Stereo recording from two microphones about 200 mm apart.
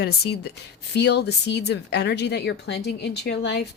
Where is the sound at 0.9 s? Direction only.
55° left (ahead or behind).